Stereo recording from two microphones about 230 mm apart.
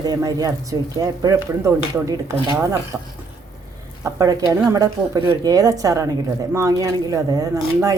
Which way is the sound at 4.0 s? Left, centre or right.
Centre.